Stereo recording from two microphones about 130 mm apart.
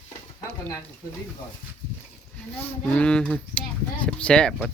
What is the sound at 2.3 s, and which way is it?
Speech, 10° left (ahead or behind).